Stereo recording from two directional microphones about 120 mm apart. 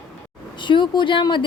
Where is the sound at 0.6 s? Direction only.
40° left (ahead or behind).